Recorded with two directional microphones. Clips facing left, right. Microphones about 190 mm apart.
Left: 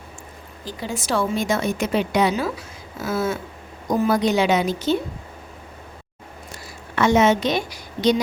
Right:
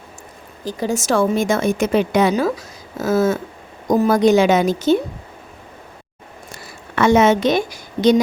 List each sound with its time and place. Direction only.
0.6 s a woman's voice: 45° right (ahead or behind)
6.9 s a woman's voice: 55° right (ahead or behind)